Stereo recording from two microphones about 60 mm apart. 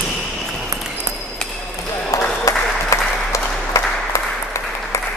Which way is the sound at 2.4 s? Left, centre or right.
Left.